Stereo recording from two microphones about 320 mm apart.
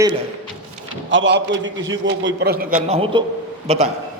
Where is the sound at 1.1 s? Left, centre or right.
Right.